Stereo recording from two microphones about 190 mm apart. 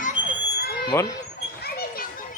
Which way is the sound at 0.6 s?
55° left (ahead or behind).